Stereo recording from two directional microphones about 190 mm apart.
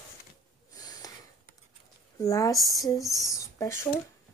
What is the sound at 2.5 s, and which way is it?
Speech, centre (ahead or behind).